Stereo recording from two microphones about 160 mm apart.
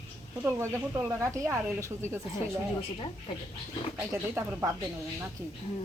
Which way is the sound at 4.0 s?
15° right (ahead or behind).